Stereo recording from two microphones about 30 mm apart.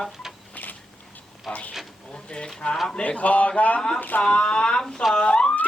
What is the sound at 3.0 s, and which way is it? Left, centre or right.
Speech, left.